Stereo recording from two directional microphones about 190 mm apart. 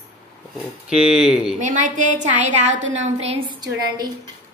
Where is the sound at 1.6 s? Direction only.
40° right (ahead or behind); by 4.1 s 20° right (ahead or behind).